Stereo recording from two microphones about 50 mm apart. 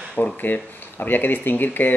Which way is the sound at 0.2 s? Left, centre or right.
Left.